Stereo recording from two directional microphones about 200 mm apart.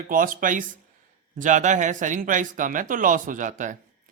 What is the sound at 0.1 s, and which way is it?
A man's voice, 45° right (ahead or behind).